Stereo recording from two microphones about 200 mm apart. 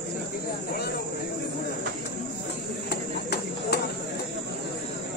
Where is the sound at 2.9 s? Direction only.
55° left (ahead or behind).